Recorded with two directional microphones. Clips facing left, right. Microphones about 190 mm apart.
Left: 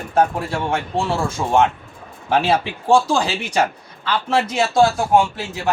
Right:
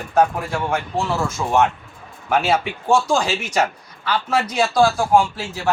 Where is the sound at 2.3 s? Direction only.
30° left (ahead or behind).